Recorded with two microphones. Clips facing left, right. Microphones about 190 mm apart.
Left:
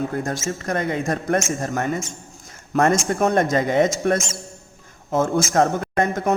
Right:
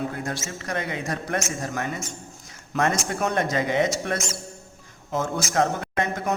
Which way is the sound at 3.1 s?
45° left (ahead or behind).